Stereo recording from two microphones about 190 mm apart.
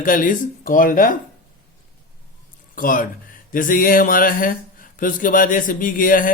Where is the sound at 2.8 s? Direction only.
45° left (ahead or behind).